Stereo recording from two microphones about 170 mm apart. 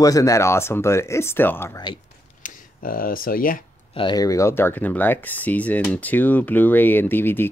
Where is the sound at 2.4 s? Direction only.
55° left (ahead or behind).